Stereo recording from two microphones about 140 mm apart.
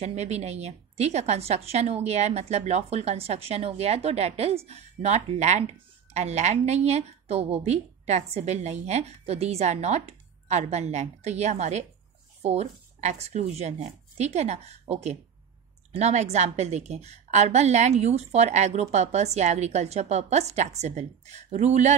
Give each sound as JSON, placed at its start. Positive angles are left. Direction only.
{"t": 0.0, "sound": "a woman's voice", "side_deg": -50}